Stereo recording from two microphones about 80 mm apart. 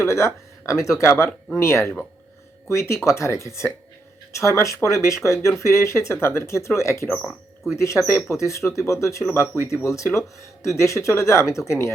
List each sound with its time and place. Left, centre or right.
0.0 s speech: left
7.2 s speech: centre
7.8 s speech: left